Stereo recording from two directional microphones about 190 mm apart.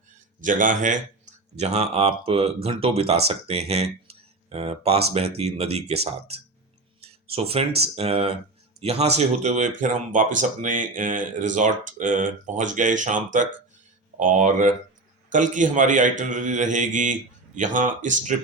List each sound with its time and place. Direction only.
0.4 s speech: 45° right (ahead or behind)
7.0 s a sound: 30° right (ahead or behind)
7.9 s speech: 30° right (ahead or behind)